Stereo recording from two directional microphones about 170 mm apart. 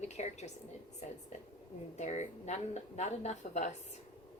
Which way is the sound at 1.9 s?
40° left (ahead or behind).